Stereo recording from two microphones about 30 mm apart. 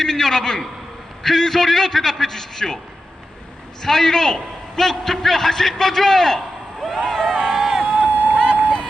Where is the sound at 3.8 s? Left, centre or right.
Centre.